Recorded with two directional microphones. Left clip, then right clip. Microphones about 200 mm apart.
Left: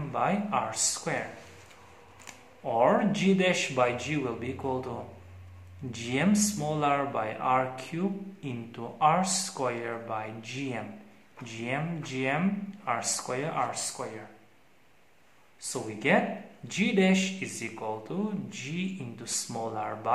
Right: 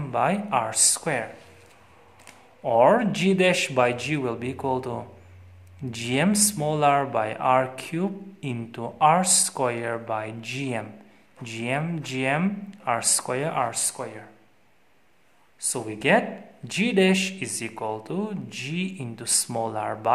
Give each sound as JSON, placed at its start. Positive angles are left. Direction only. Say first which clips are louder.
{"t": 0.1, "sound": "speech", "louder": "right 5 dB", "side_deg": -50}
{"t": 2.6, "sound": "speech", "louder": "right 6 dB", "side_deg": -50}
{"t": 15.6, "sound": "speech", "louder": "right 5 dB", "side_deg": -50}